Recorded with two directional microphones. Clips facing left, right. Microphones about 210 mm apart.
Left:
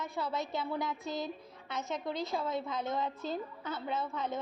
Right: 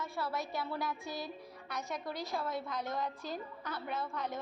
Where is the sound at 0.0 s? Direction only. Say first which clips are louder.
Left 2 dB; 20° left (ahead or behind).